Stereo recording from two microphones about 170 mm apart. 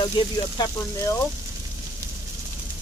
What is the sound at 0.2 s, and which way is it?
Speech, 30° left (ahead or behind).